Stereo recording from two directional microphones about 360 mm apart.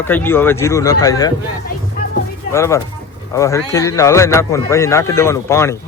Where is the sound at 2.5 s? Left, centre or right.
Centre.